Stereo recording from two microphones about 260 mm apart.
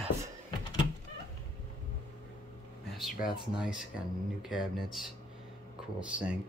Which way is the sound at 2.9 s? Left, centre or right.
Centre.